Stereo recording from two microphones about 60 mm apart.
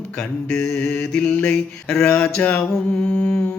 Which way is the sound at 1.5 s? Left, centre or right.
Centre.